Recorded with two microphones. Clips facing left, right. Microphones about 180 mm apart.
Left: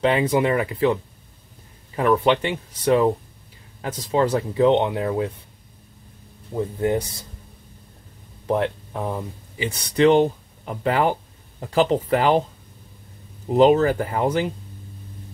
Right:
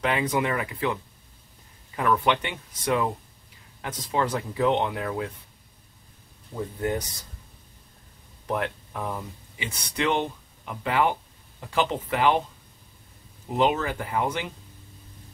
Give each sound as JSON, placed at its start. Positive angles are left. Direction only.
{"t": 0.0, "sound": "speech", "side_deg": 30}
{"t": 2.0, "sound": "speech", "side_deg": 30}
{"t": 8.5, "sound": "speech", "side_deg": 30}
{"t": 13.6, "sound": "speech", "side_deg": 40}